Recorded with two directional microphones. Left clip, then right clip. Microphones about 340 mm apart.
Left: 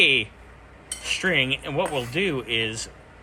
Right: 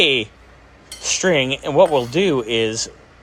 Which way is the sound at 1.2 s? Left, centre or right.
Right.